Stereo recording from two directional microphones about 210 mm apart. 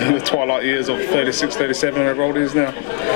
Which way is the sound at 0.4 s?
15° left (ahead or behind).